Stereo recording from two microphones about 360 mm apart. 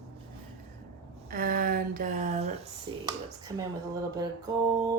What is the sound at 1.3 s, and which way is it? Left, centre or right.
Speech, right.